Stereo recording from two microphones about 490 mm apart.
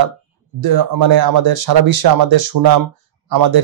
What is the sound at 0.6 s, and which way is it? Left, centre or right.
Speech, right.